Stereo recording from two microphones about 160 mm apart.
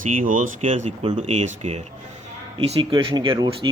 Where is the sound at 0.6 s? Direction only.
45° right (ahead or behind).